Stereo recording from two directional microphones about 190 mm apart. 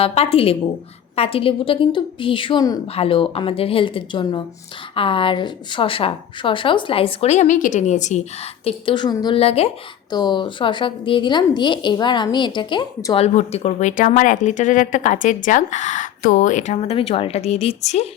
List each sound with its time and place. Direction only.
0.0 s a woman's voice: 30° left (ahead or behind)
13.1 s speech: 35° left (ahead or behind)